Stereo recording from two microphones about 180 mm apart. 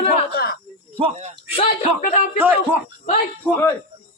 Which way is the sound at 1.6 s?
40° left (ahead or behind).